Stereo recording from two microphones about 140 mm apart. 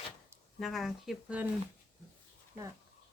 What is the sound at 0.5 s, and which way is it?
Speech, centre (ahead or behind).